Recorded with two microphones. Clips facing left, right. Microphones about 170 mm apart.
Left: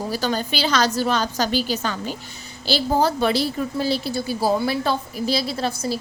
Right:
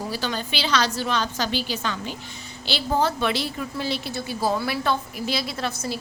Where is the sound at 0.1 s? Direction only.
40° left (ahead or behind).